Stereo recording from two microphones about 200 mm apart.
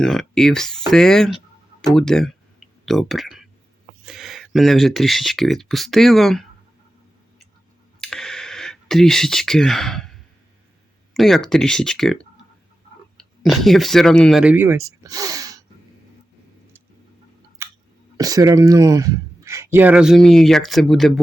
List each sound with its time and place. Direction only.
0.0 s speech: centre (ahead or behind)
8.0 s a sound: 5° left (ahead or behind)
11.1 s speech: centre (ahead or behind); by 15.6 s 15° right (ahead or behind)
17.6 s chewing: 15° right (ahead or behind)
18.2 s speech: 20° right (ahead or behind); by 21.1 s centre (ahead or behind)